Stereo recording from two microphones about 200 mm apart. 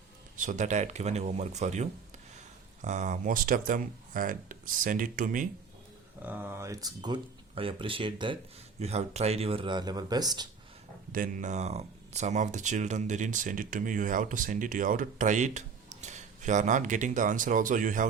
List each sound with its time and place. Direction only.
0.3 s speech: 40° right (ahead or behind)
6.2 s speech: 10° right (ahead or behind)
11.1 s speech: 40° right (ahead or behind)